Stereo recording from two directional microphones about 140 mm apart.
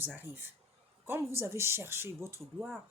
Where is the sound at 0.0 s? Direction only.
15° right (ahead or behind).